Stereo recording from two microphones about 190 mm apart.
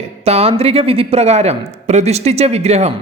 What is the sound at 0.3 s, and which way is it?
Speech, 30° right (ahead or behind).